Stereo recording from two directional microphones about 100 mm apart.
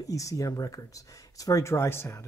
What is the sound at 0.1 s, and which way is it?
Speech, 35° left (ahead or behind).